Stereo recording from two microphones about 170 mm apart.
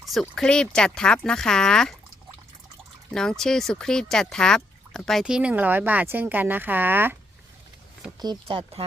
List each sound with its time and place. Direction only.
0.1 s speech: 5° left (ahead or behind)
3.1 s speech: 5° left (ahead or behind)
8.2 s speech: 30° right (ahead or behind)